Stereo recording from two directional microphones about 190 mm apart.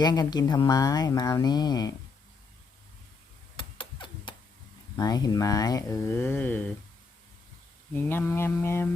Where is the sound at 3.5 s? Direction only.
25° left (ahead or behind).